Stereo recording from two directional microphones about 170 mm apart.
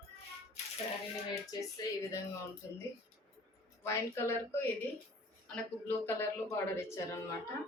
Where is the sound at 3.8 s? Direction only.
15° left (ahead or behind).